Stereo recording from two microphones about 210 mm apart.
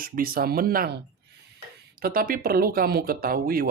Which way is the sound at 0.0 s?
45° right (ahead or behind).